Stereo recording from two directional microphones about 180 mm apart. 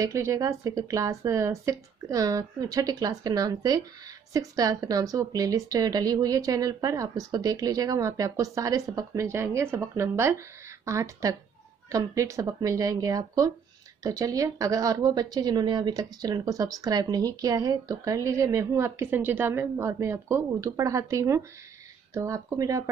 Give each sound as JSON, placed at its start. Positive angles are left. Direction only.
{"t": 0.0, "sound": "a woman's voice", "side_deg": -15}